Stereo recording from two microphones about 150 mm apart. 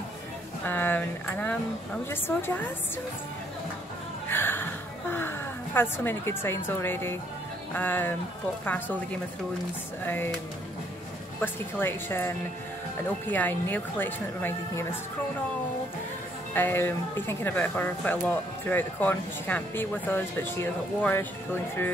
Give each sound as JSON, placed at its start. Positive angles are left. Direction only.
{"t": 0.7, "sound": "speech", "side_deg": 10}
{"t": 4.3, "sound": "a sound", "side_deg": 15}
{"t": 5.8, "sound": "speech", "side_deg": 15}
{"t": 11.4, "sound": "speech", "side_deg": 15}
{"t": 16.5, "sound": "speech", "side_deg": 15}